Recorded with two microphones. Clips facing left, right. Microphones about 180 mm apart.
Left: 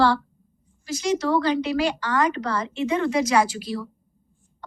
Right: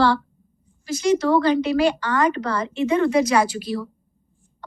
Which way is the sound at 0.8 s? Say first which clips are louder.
Right 4 dB; 55° right (ahead or behind).